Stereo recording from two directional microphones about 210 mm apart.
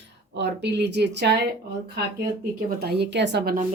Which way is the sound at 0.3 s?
55° right (ahead or behind).